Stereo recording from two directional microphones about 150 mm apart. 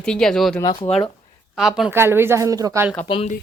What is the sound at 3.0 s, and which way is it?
Speech, 35° left (ahead or behind).